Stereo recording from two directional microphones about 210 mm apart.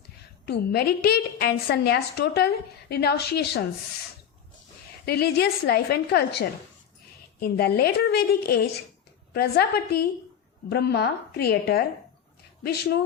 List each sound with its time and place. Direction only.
0.4 s a woman's voice: 50° left (ahead or behind)
5.0 s a woman's voice: 50° left (ahead or behind)